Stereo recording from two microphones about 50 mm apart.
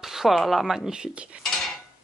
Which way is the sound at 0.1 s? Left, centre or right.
Centre.